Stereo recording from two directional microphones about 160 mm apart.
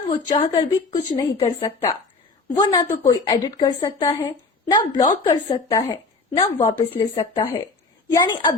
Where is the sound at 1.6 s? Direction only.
20° left (ahead or behind).